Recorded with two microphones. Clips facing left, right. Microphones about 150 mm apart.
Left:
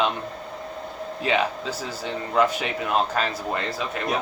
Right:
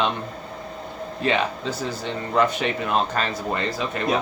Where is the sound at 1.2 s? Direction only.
5° left (ahead or behind).